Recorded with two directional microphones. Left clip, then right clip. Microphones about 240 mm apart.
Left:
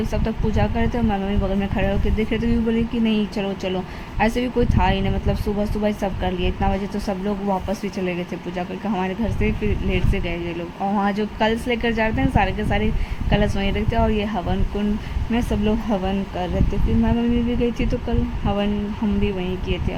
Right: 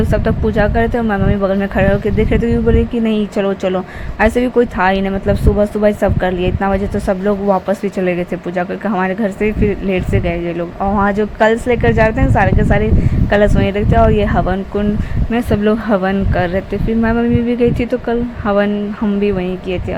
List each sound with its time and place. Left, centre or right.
0.1 s speech: centre